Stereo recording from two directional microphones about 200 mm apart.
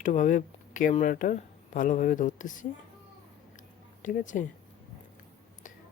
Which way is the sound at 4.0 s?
40° left (ahead or behind).